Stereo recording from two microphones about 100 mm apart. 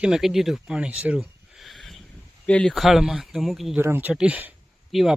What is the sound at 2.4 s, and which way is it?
Speech, 10° left (ahead or behind).